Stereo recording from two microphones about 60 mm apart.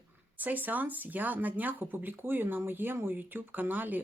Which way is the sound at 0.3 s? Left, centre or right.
Right.